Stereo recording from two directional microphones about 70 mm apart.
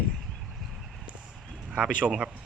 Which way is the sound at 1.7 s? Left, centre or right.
Centre.